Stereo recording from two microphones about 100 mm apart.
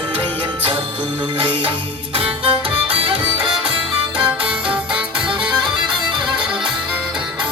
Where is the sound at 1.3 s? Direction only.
60° right (ahead or behind).